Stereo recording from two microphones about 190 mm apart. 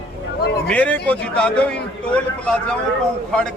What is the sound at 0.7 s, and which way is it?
A man's voice, 5° left (ahead or behind).